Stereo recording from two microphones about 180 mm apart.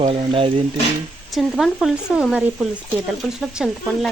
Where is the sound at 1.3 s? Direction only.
Centre (ahead or behind).